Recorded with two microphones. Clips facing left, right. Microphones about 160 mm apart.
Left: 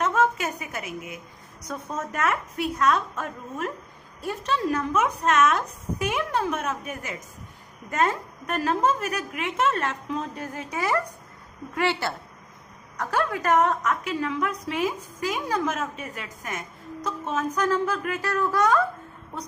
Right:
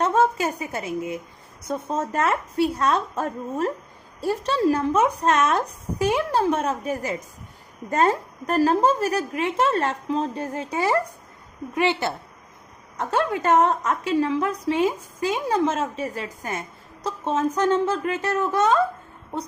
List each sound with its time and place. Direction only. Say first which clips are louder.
0.0 s a woman's voice: right 3 dB; 30° right (ahead or behind)
11.7 s a woman's voice: right 3 dB; 20° right (ahead or behind)